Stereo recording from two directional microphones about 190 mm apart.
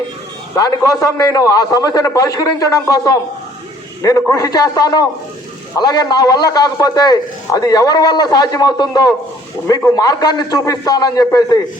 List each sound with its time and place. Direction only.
0.5 s a man's voice: 20° left (ahead or behind)